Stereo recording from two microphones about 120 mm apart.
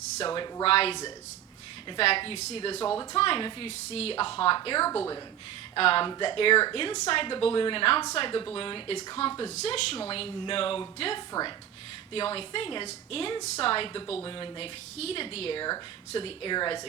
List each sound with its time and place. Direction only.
0.3 s speech: 40° left (ahead or behind)
0.6 s a woman's voice: 55° left (ahead or behind)
2.0 s a woman's voice: 50° left (ahead or behind)
9.2 s a woman's voice: 60° left (ahead or behind)
11.3 s speech: 35° left (ahead or behind)
12.1 s a woman's voice: 50° left (ahead or behind)
14.9 s a woman's voice: 55° left (ahead or behind); by 16.8 s 40° left (ahead or behind)